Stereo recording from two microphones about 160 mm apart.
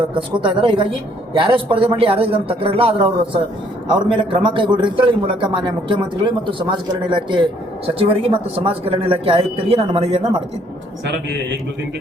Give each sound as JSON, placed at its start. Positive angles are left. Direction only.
{"t": 0.0, "sound": "a man's voice", "side_deg": -30}